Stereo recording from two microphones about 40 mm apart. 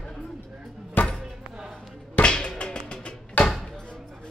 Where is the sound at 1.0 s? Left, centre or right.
Left.